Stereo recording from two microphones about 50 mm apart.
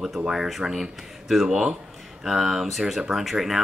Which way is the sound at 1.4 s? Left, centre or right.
Centre.